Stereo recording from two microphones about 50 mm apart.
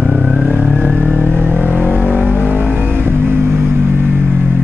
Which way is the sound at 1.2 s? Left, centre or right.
Left.